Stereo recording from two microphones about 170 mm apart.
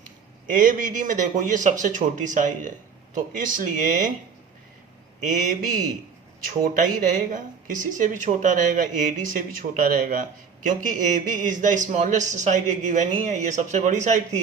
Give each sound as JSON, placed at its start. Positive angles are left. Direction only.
{"t": 0.4, "sound": "a man's voice", "side_deg": -50}
{"t": 5.2, "sound": "a man's voice", "side_deg": -50}
{"t": 6.7, "sound": "a man's voice", "side_deg": -50}